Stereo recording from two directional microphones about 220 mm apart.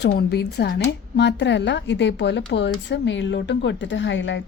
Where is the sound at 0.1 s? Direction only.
45° left (ahead or behind).